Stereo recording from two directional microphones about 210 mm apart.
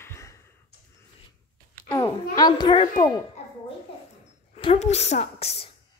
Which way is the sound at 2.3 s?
20° left (ahead or behind).